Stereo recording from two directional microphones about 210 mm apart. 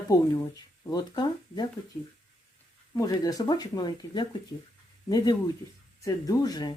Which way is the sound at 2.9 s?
15° left (ahead or behind).